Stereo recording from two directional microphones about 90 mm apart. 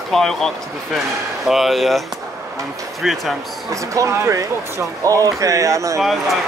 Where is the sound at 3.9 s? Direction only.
35° right (ahead or behind).